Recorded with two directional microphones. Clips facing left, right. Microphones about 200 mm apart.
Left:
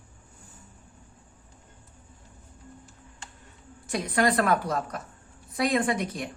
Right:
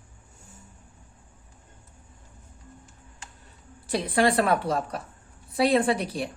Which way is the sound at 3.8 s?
30° right (ahead or behind).